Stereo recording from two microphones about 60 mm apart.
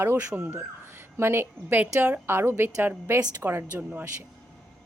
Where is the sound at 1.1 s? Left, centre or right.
Right.